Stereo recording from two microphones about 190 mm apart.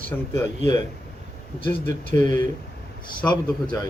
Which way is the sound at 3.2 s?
25° left (ahead or behind).